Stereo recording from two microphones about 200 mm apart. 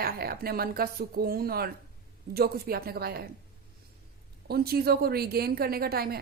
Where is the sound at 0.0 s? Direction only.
50° right (ahead or behind).